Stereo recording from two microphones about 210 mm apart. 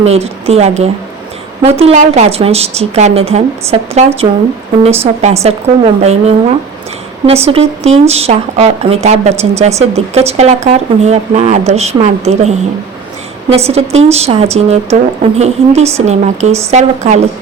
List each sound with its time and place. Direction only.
0.0 s a woman's voice: 30° right (ahead or behind)
13.7 s a woman's voice: 30° right (ahead or behind)